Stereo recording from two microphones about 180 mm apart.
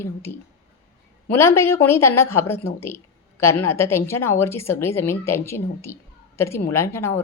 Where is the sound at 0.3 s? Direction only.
55° left (ahead or behind).